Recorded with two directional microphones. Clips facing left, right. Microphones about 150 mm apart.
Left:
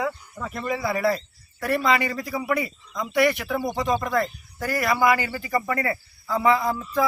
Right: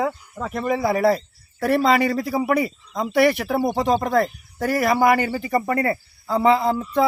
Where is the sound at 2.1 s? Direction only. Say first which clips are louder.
Right 5 dB; 30° right (ahead or behind).